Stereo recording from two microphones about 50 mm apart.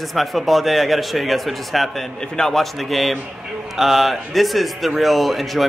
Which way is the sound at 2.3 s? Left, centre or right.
Centre.